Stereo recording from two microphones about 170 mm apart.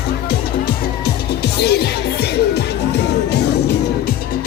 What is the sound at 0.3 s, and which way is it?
Music, 65° left (ahead or behind).